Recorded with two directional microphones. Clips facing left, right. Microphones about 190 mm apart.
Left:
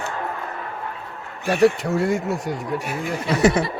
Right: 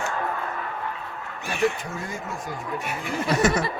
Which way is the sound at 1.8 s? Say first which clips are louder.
Left 12 dB; 75° left (ahead or behind).